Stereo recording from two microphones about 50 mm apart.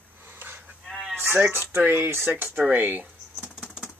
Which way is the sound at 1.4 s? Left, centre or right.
Right.